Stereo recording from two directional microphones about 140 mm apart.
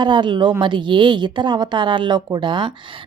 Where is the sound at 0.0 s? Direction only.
35° right (ahead or behind).